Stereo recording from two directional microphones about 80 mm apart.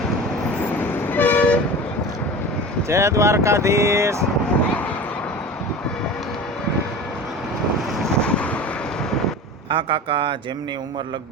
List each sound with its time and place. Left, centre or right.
0.8 s toot: left
2.9 s speech: right
8.2 s vehicle: centre
9.6 s speech: right